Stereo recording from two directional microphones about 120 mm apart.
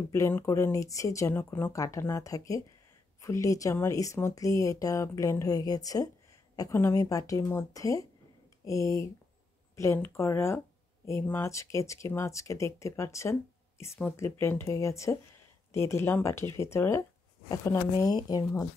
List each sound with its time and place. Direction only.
0.1 s speech: 25° left (ahead or behind)